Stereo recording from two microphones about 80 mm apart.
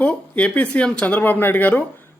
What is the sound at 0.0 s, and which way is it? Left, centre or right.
Speech, centre.